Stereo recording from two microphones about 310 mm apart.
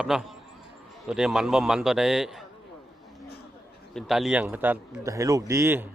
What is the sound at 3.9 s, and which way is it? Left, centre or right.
A man's voice, centre.